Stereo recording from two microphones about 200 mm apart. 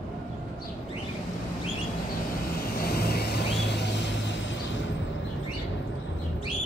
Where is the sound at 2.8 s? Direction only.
50° left (ahead or behind); by 4.8 s 65° left (ahead or behind).